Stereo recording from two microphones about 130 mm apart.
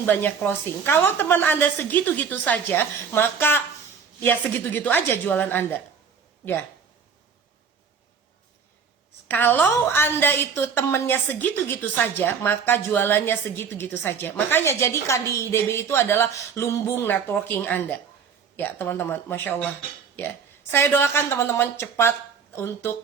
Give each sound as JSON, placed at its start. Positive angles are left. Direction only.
{"t": 0.0, "sound": "a woman's voice", "side_deg": 15}
{"t": 9.2, "sound": "a woman's voice", "side_deg": 15}